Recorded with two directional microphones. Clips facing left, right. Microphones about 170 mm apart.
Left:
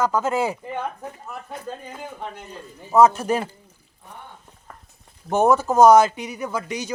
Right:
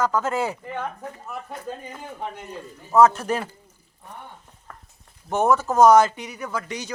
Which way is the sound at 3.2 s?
20° left (ahead or behind).